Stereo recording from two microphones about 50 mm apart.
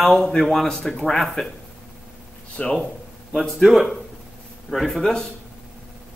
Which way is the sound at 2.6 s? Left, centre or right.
Left.